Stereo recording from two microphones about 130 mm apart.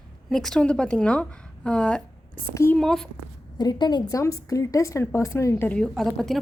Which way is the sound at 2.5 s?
20° left (ahead or behind).